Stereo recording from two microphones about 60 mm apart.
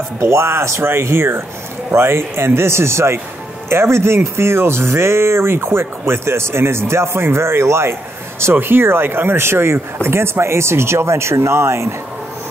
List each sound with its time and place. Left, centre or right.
0.2 s speech: right